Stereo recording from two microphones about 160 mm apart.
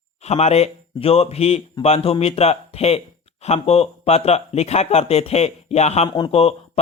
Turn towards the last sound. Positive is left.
turn(degrees=35)  # may be behind; listen again after turning